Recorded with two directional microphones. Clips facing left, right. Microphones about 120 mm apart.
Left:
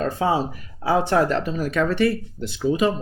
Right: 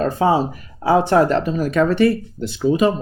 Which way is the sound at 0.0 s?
40° right (ahead or behind).